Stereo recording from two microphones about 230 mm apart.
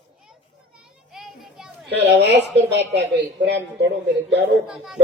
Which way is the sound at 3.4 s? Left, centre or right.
Right.